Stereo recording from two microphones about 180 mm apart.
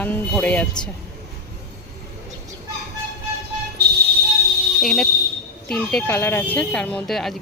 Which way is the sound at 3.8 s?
65° right (ahead or behind).